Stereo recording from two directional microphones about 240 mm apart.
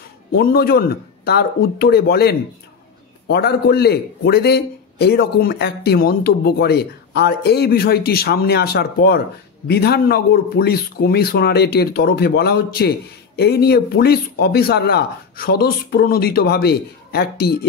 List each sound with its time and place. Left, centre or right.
0.3 s a man's voice: left